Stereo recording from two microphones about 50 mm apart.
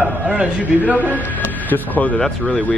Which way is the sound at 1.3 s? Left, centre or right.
Left.